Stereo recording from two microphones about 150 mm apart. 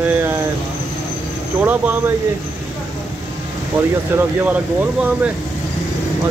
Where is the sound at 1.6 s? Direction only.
10° right (ahead or behind).